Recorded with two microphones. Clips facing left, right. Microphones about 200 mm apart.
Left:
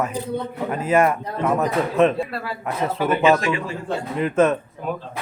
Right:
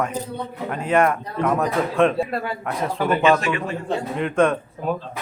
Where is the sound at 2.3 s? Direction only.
25° right (ahead or behind).